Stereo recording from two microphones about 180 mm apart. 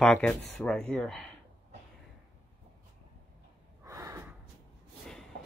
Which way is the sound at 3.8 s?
15° right (ahead or behind).